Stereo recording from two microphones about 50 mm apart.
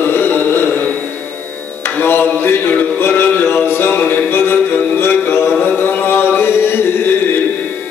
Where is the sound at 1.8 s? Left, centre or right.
Left.